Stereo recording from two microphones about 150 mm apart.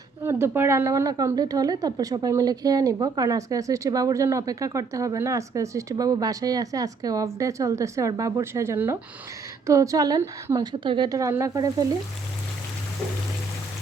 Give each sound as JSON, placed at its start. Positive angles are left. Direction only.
{"t": 0.2, "sound": "speech", "side_deg": -15}